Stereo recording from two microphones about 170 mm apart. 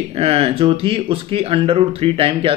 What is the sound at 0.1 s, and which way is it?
Speech, 35° right (ahead or behind).